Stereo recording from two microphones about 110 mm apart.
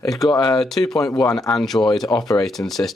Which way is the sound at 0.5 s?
5° left (ahead or behind).